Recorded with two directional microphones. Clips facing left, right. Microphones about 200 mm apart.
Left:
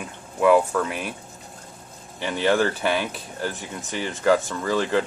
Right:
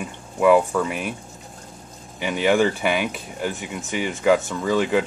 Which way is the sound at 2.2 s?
10° right (ahead or behind).